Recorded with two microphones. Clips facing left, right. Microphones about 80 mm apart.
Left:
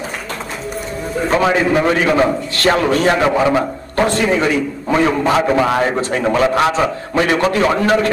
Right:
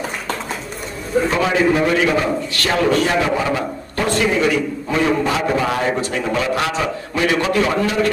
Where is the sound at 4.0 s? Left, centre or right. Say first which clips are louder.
Left 3 dB; left.